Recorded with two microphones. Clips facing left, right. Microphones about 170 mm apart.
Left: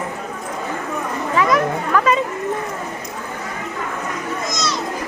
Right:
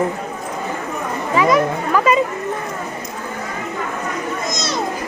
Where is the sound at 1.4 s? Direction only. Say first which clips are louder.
Right 2 dB; 5° right (ahead or behind).